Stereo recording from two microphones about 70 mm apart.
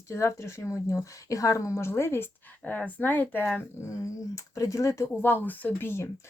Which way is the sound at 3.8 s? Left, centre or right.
Left.